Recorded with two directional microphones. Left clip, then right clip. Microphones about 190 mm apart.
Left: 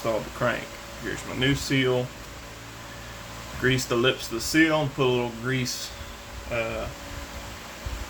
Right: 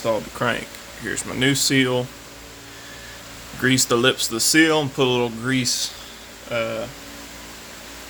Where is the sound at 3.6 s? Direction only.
65° right (ahead or behind).